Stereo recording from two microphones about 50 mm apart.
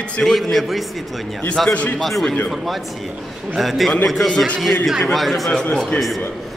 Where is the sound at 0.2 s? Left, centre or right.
Centre.